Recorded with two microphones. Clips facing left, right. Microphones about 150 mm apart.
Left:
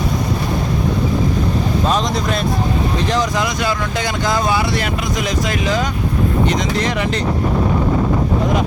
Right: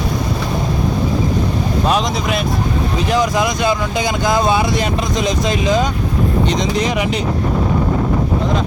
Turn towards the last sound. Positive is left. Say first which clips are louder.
# right 1 dB
turn(degrees=-15)  # may be behind; listen again after turning